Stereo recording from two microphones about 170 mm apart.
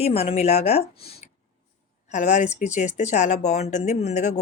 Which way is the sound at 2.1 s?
45° left (ahead or behind).